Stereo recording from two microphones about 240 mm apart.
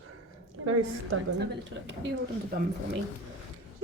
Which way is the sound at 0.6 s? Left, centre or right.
Right.